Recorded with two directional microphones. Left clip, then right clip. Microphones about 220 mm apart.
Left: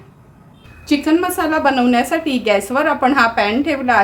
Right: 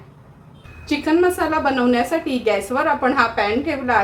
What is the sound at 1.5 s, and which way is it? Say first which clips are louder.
A woman's voice: left 3 dB; 45° left (ahead or behind).